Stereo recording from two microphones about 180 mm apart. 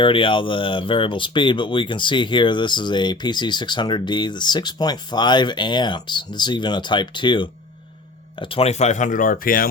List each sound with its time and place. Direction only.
0.0 s speech: 30° left (ahead or behind); by 9.6 s 50° left (ahead or behind)